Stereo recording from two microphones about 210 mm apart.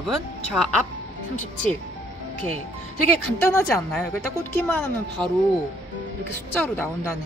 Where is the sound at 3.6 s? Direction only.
10° left (ahead or behind).